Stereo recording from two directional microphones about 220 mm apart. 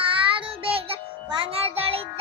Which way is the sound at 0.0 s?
25° right (ahead or behind).